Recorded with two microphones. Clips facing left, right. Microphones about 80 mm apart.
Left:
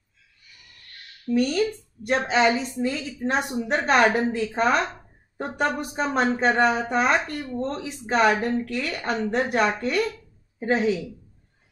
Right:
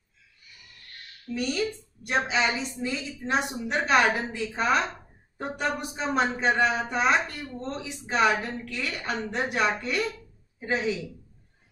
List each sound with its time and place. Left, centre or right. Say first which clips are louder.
1.3 s speech: left 6 dB; left